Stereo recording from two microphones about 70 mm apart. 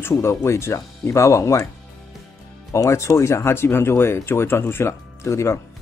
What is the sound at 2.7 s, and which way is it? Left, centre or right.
Speech, left.